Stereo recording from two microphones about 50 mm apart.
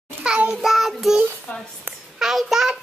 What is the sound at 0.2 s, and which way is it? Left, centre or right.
Speech, centre.